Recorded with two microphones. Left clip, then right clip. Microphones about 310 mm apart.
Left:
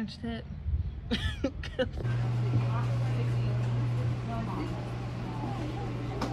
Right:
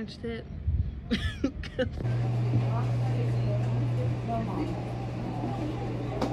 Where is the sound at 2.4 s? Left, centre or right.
Centre.